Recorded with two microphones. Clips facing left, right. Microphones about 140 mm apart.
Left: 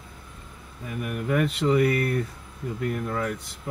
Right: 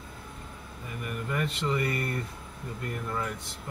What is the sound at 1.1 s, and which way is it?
Speech, 75° left (ahead or behind).